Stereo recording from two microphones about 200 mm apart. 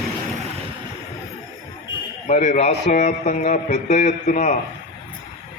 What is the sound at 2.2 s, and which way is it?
A man's voice, 35° left (ahead or behind).